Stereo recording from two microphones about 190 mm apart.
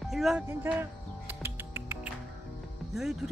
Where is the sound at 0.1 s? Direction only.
Centre (ahead or behind).